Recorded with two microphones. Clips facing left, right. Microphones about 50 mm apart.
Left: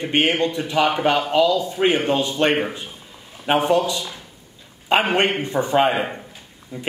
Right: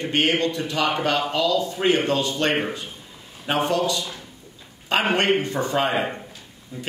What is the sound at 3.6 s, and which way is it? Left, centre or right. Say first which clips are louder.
A man's voice: left 3 dB; centre.